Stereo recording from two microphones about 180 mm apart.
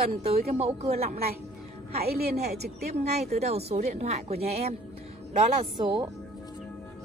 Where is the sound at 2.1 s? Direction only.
60° right (ahead or behind).